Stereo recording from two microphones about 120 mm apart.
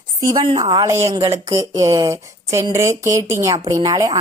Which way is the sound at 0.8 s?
25° right (ahead or behind).